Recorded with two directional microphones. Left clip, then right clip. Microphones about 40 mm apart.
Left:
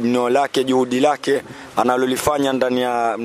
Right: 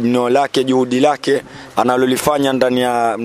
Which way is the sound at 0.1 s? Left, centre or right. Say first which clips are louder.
Right 3 dB; right.